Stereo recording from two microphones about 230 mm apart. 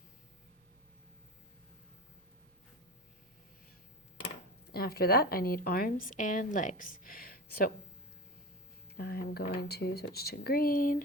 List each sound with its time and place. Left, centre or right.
4.7 s a woman's voice: left
9.0 s speech: left